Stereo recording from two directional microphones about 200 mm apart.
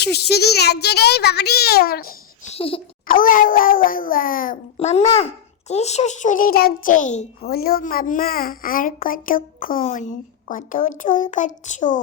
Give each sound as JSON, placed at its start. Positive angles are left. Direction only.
{"t": 0.0, "sound": "a child's voice", "side_deg": 55}
{"t": 2.5, "sound": "a sound", "side_deg": 30}
{"t": 3.1, "sound": "a child's voice", "side_deg": 45}
{"t": 7.4, "sound": "a child's voice", "side_deg": 50}